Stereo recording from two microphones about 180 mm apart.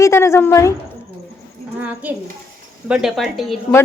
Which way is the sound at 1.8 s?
10° right (ahead or behind).